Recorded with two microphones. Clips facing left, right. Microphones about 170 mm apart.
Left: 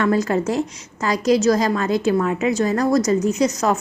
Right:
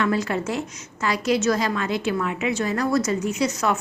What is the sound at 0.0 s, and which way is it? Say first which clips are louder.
A woman's voice: left 5 dB; 45° left (ahead or behind).